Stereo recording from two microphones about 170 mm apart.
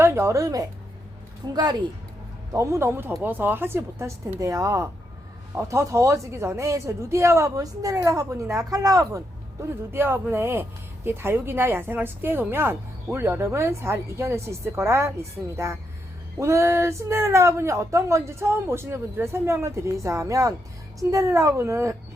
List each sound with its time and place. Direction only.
0.0 s speech: 15° right (ahead or behind)